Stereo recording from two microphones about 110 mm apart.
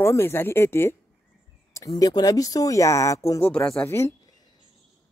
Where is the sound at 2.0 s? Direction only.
35° left (ahead or behind).